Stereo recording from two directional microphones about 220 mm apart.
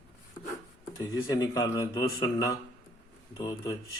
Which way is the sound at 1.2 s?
15° left (ahead or behind).